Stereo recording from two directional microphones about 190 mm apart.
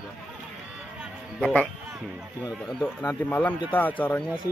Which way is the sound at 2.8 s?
10° left (ahead or behind).